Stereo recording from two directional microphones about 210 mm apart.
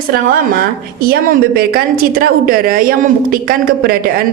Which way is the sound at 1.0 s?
45° right (ahead or behind).